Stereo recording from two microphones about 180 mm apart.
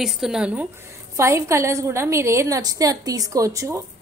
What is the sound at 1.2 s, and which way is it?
A woman's voice, 15° right (ahead or behind).